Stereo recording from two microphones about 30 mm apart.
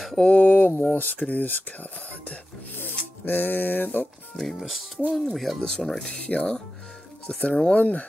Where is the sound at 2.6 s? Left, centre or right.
Left.